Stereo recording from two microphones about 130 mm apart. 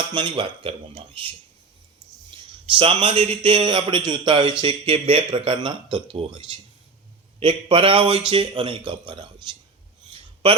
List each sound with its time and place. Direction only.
0.1 s speech: 35° right (ahead or behind)
2.3 s a man's voice: 40° right (ahead or behind)
10.4 s a man's voice: 45° right (ahead or behind)